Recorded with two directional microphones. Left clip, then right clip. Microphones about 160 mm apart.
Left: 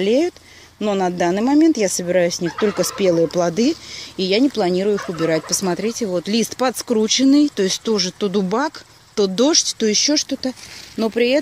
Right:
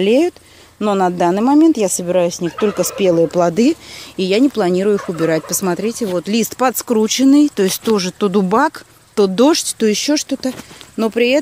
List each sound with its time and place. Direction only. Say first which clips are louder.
0.0 s speech: right 4 dB; 15° right (ahead or behind)
2.4 s speech: right 2 dB; 40° left (ahead or behind)
2.8 s speech: right 3 dB; 5° right (ahead or behind)